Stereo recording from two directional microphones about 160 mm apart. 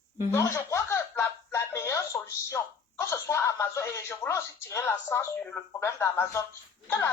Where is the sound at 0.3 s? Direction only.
15° left (ahead or behind).